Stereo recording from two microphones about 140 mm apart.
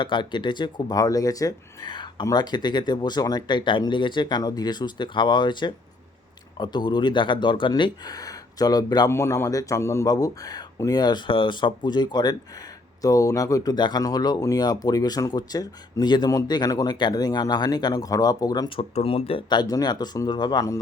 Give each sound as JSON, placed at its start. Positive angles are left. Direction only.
{"t": 0.0, "sound": "speech", "side_deg": 35}
{"t": 18.8, "sound": "speech", "side_deg": 45}